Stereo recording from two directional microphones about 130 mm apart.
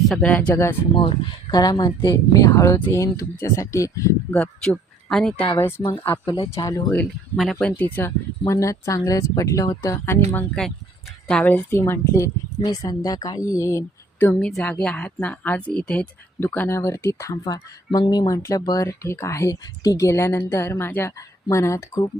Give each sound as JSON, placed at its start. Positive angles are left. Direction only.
{"t": 0.1, "sound": "a woman's voice", "side_deg": 10}
{"t": 0.9, "sound": "speech", "side_deg": 40}
{"t": 4.3, "sound": "speech", "side_deg": 5}
{"t": 5.5, "sound": "a woman's voice", "side_deg": 20}
{"t": 6.2, "sound": "speech", "side_deg": 35}
{"t": 7.8, "sound": "speech", "side_deg": 15}
{"t": 10.6, "sound": "a woman's voice", "side_deg": 10}
{"t": 14.3, "sound": "a woman's voice", "side_deg": 5}
{"t": 16.4, "sound": "speech", "side_deg": 15}